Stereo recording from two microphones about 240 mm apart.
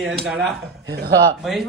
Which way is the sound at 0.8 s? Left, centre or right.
Right.